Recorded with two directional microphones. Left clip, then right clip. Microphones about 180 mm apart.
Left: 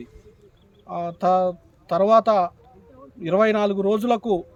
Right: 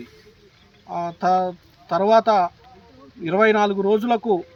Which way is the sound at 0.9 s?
45° left (ahead or behind).